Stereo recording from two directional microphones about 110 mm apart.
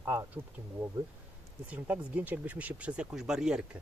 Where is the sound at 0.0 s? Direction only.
30° right (ahead or behind).